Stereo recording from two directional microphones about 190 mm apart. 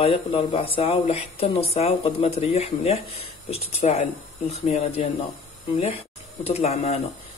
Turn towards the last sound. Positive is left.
turn(degrees=35)  # may be behind; listen again after turning